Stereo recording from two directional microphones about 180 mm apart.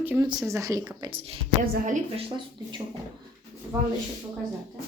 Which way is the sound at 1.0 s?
30° right (ahead or behind).